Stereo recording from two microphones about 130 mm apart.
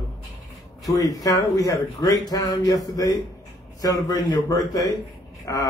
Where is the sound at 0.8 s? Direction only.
25° left (ahead or behind).